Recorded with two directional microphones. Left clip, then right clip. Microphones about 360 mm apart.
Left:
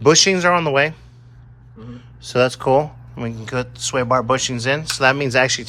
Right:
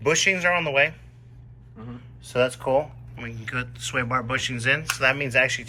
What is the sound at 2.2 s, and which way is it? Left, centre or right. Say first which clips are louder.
Speech: left 6 dB; left.